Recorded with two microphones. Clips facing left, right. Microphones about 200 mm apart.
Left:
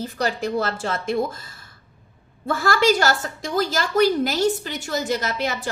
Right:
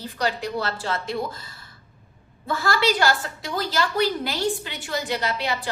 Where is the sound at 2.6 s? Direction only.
50° left (ahead or behind).